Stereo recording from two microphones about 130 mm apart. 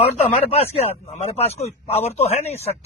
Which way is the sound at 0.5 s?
50° left (ahead or behind).